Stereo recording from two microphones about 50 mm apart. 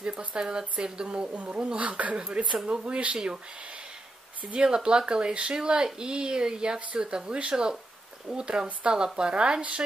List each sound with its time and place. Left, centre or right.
0.0 s speech: right
2.1 s speech: centre
4.4 s speech: right